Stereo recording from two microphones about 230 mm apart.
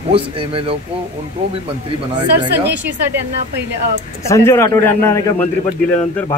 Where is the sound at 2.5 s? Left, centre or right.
Right.